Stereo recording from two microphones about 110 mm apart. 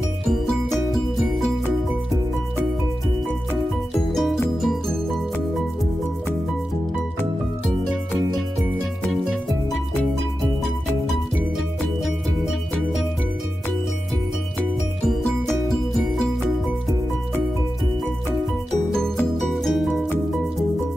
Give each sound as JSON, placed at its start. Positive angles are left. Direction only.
{"t": 0.3, "sound": "music", "side_deg": 0}
{"t": 4.1, "sound": "music", "side_deg": 0}
{"t": 9.1, "sound": "music", "side_deg": 0}
{"t": 19.5, "sound": "music", "side_deg": 0}